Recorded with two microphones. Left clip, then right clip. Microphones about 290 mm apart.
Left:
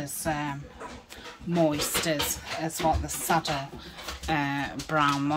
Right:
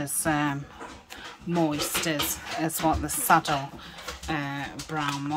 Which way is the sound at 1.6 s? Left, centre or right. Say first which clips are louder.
Left 2 dB; centre.